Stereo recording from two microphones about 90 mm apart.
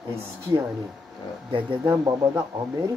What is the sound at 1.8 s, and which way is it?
Speech, 35° right (ahead or behind).